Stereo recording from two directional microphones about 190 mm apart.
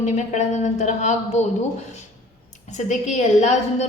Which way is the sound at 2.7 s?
40° left (ahead or behind).